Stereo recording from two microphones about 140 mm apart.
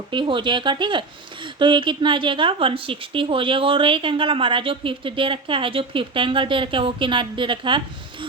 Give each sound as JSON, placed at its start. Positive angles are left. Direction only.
{"t": 0.1, "sound": "a woman's voice", "side_deg": -35}